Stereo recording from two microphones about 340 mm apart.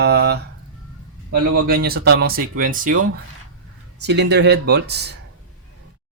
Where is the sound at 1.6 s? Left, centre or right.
Right.